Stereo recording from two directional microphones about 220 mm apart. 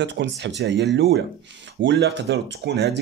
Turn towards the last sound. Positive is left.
turn(degrees=-50)  # may be behind; listen again after turning